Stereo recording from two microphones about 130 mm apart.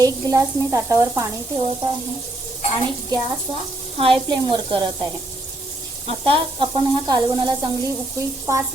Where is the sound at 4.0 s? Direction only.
40° right (ahead or behind).